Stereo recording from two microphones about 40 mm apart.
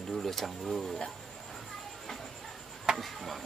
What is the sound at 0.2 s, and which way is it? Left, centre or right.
Speech, centre.